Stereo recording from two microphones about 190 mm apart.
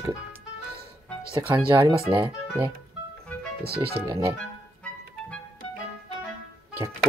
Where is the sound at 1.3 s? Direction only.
25° right (ahead or behind).